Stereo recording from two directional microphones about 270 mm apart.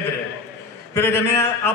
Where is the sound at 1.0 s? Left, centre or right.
Centre.